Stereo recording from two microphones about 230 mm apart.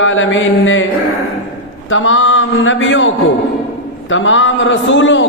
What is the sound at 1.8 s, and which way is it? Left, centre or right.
A man's voice, left.